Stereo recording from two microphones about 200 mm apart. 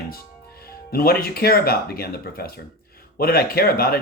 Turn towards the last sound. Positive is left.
turn(degrees=50)  # may be behind; listen again after turning